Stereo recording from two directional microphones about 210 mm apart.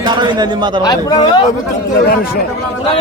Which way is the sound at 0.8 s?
15° left (ahead or behind).